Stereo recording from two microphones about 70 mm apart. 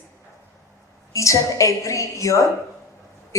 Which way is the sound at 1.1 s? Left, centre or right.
Left.